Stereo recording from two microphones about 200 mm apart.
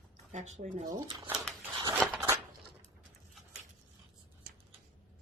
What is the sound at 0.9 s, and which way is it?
Speech, 20° right (ahead or behind).